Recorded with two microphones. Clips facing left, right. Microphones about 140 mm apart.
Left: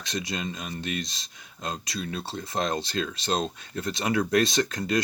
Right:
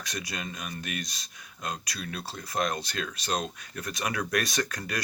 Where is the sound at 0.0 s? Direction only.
25° left (ahead or behind).